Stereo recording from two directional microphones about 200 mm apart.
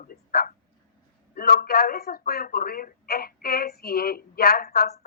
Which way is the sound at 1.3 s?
50° left (ahead or behind).